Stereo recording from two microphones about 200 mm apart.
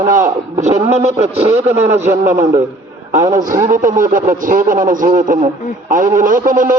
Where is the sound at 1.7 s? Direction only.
10° right (ahead or behind).